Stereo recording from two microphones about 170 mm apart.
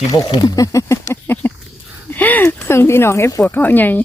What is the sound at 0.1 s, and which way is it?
Speech, 20° left (ahead or behind).